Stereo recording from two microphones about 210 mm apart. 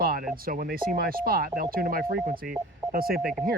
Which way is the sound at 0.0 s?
45° right (ahead or behind).